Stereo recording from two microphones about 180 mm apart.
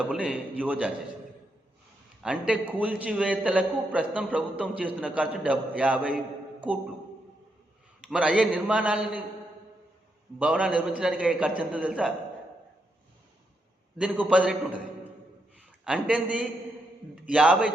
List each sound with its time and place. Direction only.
0.0 s a man's voice: 5° right (ahead or behind)
2.2 s a man's voice: 5° right (ahead or behind)
8.0 s a man's voice: 5° right (ahead or behind)
10.3 s a man's voice: 5° right (ahead or behind)
14.0 s a man's voice: 5° right (ahead or behind)
15.8 s a man's voice: 5° right (ahead or behind)